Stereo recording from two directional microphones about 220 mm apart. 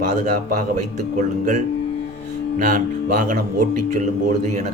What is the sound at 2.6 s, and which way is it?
Speech, 35° right (ahead or behind).